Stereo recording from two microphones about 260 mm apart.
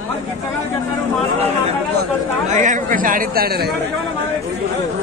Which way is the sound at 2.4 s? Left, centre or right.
Right.